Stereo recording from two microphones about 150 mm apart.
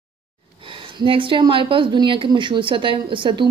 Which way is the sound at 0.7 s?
35° right (ahead or behind).